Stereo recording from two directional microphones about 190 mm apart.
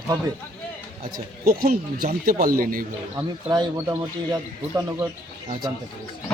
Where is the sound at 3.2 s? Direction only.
20° right (ahead or behind).